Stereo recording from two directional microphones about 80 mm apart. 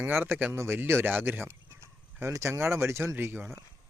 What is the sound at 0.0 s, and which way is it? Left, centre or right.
Speech, right.